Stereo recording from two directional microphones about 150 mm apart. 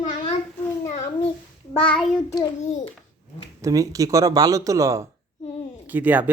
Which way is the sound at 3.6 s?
20° right (ahead or behind).